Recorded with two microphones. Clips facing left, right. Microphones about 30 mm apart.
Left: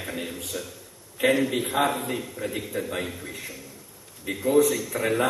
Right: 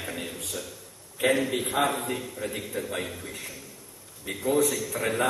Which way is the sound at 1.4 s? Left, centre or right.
Centre.